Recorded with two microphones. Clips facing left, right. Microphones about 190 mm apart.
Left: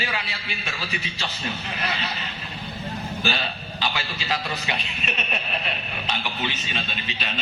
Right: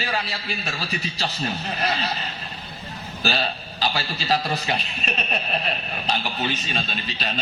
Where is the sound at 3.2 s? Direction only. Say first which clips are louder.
Right 5 dB; 40° right (ahead or behind).